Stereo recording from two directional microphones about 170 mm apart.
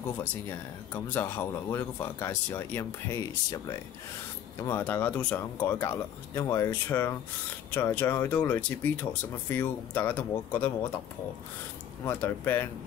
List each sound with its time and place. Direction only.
0.2 s speech: 10° left (ahead or behind)
4.6 s speech: 15° left (ahead or behind)
12.0 s speech: 10° left (ahead or behind)